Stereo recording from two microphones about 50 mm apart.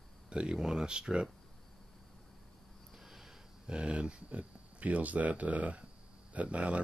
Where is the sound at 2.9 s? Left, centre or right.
Centre.